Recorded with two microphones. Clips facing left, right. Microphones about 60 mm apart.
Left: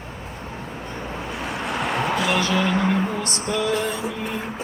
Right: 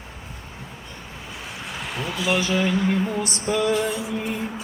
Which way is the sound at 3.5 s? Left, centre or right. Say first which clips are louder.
Right 2 dB; centre.